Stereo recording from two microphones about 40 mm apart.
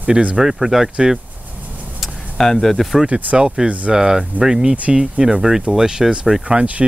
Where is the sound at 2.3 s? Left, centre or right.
Centre.